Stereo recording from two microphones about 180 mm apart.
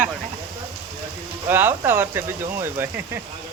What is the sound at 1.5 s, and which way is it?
Speech, 10° right (ahead or behind).